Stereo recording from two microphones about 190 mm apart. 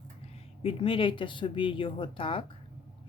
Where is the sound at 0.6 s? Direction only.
30° left (ahead or behind).